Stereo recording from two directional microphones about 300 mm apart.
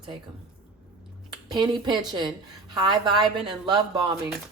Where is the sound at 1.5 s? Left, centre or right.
Centre.